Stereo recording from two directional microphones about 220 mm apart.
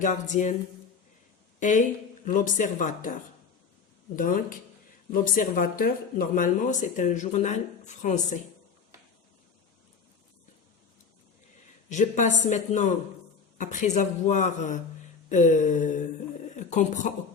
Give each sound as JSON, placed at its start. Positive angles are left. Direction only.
{"t": 0.0, "sound": "speech", "side_deg": 35}
{"t": 1.5, "sound": "speech", "side_deg": 35}
{"t": 11.9, "sound": "speech", "side_deg": 35}